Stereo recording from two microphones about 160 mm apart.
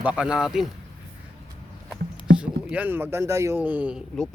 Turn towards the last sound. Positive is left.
turn(degrees=-10)  # may be behind; listen again after turning